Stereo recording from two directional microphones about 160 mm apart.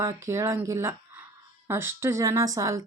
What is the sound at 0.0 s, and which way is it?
Speech, 20° right (ahead or behind).